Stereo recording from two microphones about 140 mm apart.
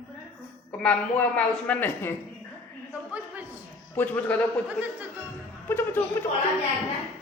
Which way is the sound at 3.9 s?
10° left (ahead or behind).